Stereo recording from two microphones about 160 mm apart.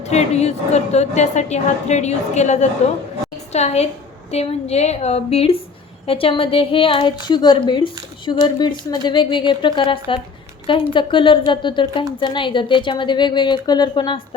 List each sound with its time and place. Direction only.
0.1 s a woman's voice: 45° left (ahead or behind)